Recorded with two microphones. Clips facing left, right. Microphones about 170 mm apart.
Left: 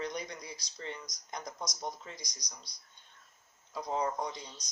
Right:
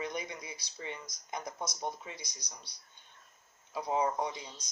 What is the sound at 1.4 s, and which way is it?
Speech, 25° right (ahead or behind).